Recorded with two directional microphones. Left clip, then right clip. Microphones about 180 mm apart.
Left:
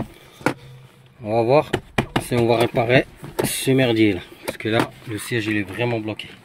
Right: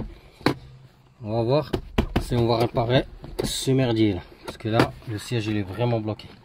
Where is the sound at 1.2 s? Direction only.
10° right (ahead or behind).